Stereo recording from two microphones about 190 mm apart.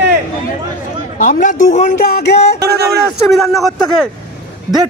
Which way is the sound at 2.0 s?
55° left (ahead or behind).